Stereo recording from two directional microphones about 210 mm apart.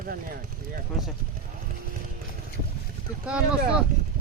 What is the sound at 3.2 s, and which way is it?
Speech, 5° right (ahead or behind).